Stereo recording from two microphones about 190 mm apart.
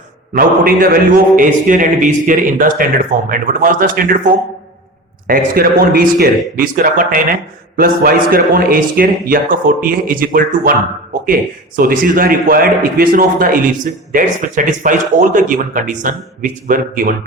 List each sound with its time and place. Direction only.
0.3 s a man's voice: 50° right (ahead or behind)
11.8 s a man's voice: 45° right (ahead or behind)